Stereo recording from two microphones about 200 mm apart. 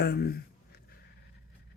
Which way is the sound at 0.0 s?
50° left (ahead or behind).